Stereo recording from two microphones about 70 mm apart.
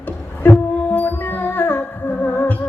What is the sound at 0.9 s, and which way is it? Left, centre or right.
Music, left.